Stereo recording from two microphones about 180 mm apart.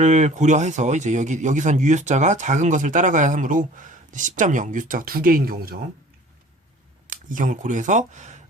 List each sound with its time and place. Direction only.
0.0 s speech: 40° right (ahead or behind)
7.1 s speech: 45° right (ahead or behind)